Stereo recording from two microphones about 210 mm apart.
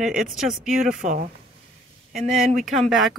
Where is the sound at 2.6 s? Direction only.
Centre (ahead or behind).